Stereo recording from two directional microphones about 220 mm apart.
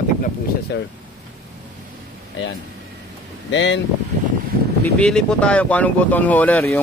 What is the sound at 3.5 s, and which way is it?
Speech, 55° left (ahead or behind).